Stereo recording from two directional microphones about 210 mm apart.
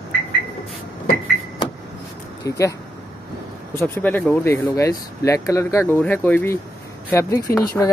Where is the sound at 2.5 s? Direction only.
15° left (ahead or behind).